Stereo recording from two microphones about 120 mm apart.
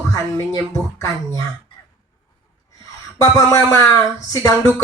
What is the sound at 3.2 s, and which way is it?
Speech, 30° left (ahead or behind).